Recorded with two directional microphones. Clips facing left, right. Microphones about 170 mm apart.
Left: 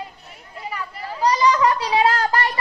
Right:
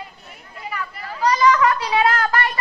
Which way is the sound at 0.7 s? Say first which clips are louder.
Even; 30° left (ahead or behind).